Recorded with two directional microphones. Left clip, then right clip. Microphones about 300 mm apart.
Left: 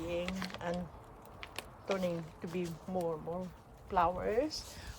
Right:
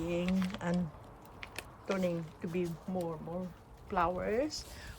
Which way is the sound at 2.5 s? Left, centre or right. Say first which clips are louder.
Right 1 dB; left.